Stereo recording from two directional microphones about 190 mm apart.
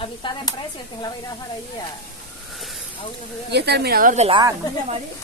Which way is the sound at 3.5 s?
60° right (ahead or behind).